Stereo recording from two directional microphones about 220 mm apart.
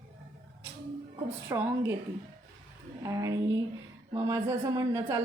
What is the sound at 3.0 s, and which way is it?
A woman's voice, 15° right (ahead or behind).